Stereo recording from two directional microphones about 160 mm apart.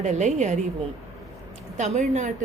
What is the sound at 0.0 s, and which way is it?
Speech, 45° right (ahead or behind).